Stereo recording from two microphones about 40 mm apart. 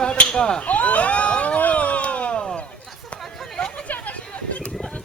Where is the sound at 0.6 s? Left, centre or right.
Left.